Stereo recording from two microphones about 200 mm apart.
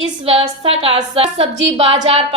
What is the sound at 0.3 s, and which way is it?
A woman's voice, 25° right (ahead or behind).